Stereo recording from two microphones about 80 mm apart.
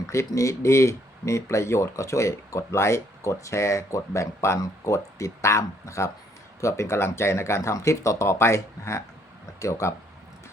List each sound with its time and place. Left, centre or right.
0.3 s speech: left